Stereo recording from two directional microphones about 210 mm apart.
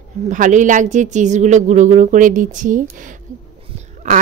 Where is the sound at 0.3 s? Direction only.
35° right (ahead or behind).